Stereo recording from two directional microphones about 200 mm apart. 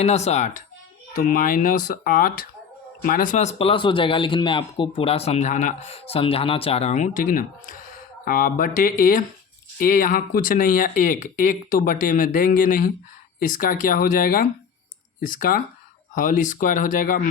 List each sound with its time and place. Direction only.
0.0 s speech: 35° left (ahead or behind)